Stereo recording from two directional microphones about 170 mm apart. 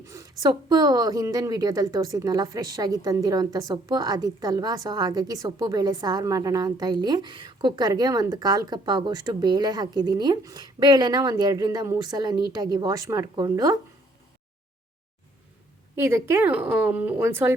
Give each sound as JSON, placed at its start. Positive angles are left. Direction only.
{"t": 0.0, "sound": "a woman's voice", "side_deg": -20}
{"t": 16.0, "sound": "a woman's voice", "side_deg": -15}